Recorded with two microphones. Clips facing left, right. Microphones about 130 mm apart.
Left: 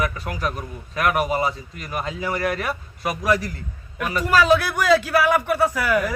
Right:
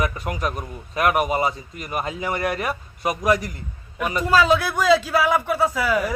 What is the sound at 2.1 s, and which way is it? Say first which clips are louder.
Speech: even; 20° right (ahead or behind).